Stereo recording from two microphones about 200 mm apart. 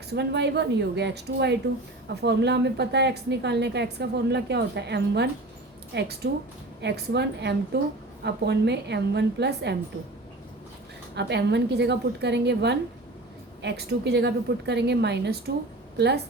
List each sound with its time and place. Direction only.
0.1 s a woman's voice: 55° right (ahead or behind)
11.1 s a woman's voice: 60° right (ahead or behind)